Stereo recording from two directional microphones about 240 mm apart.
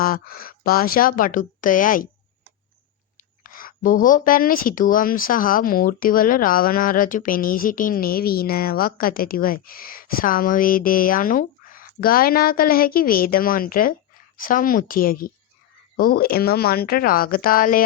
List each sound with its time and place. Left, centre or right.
0.0 s a woman's voice: left
3.4 s a woman's voice: left